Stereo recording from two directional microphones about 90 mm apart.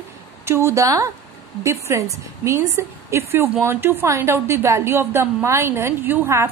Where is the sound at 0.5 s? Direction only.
30° right (ahead or behind).